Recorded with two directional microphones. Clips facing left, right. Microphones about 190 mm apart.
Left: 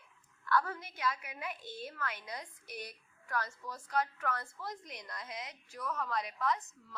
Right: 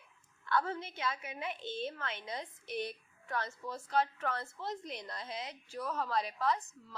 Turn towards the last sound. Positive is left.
turn(degrees=-30)  # may be behind; listen again after turning